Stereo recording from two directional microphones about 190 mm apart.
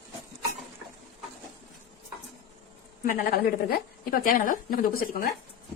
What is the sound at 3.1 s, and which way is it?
A woman's voice, 50° left (ahead or behind).